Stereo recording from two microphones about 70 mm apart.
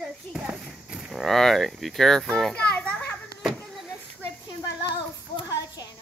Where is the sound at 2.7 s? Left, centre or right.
Left.